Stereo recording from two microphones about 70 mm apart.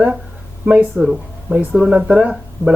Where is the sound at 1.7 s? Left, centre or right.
Centre.